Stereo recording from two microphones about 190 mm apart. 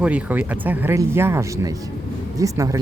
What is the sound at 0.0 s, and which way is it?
Speech, 5° right (ahead or behind).